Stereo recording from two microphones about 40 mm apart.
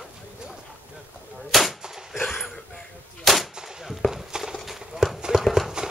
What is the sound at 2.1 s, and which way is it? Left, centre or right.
Wheeze, centre.